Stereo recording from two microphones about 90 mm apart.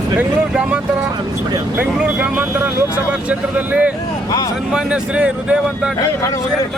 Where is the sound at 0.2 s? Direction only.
15° right (ahead or behind).